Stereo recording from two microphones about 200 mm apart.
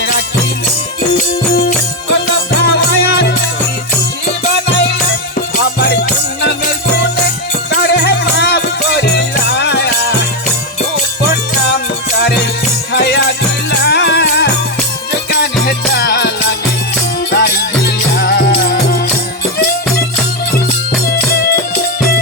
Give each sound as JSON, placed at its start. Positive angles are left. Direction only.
{"t": 2.6, "sound": "music", "side_deg": 55}
{"t": 5.5, "sound": "music", "side_deg": 55}
{"t": 7.7, "sound": "music", "side_deg": 55}
{"t": 12.2, "sound": "music", "side_deg": 55}
{"t": 21.1, "sound": "music", "side_deg": 50}